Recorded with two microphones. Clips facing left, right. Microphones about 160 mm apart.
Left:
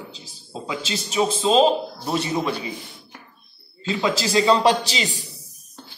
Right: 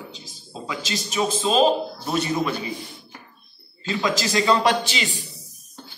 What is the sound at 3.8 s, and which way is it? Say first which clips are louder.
A man's voice: left 1 dB; 30° left (ahead or behind).